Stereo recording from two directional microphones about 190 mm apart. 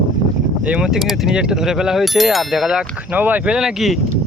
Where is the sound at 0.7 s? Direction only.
5° right (ahead or behind).